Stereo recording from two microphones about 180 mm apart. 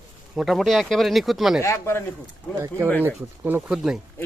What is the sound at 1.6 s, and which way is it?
Speech, 15° left (ahead or behind).